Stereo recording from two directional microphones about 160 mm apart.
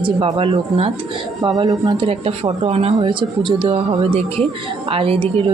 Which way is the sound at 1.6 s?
25° right (ahead or behind).